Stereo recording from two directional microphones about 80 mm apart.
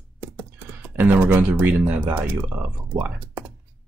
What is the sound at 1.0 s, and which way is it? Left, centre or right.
Speech, right.